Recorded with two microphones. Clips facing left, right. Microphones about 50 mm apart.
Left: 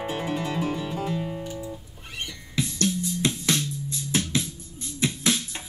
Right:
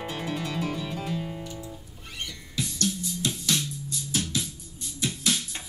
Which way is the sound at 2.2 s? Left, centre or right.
Left.